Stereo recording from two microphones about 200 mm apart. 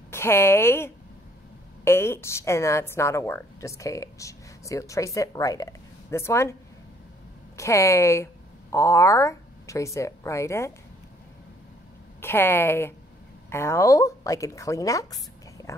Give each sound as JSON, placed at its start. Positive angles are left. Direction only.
{"t": 0.1, "sound": "a woman's voice", "side_deg": 10}
{"t": 7.5, "sound": "speech", "side_deg": 15}
{"t": 12.2, "sound": "a woman's voice", "side_deg": 10}